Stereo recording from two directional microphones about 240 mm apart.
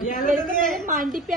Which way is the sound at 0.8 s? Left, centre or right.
Right.